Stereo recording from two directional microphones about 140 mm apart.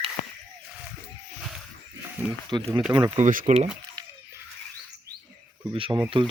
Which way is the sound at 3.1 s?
65° right (ahead or behind).